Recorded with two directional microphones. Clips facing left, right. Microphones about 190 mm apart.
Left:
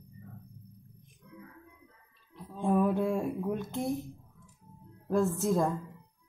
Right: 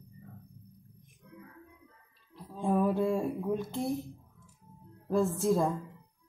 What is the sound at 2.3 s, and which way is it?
Speech, 5° right (ahead or behind).